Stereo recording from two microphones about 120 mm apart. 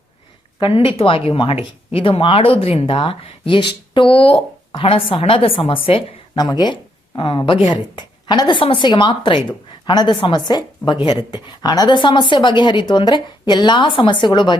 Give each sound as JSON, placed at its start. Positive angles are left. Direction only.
{"t": 0.6, "sound": "speech", "side_deg": 50}
{"t": 6.3, "sound": "a woman's voice", "side_deg": 35}